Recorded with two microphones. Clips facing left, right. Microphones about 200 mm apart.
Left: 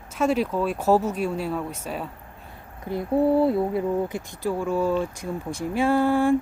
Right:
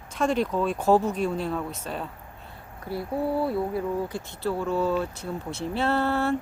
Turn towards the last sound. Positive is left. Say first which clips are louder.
# left 5 dB
turn(degrees=10)  # may be behind; listen again after turning